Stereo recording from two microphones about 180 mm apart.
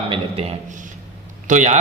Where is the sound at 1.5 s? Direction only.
40° right (ahead or behind).